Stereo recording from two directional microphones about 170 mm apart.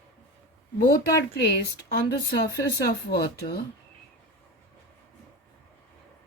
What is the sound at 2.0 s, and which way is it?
Speech, 70° left (ahead or behind).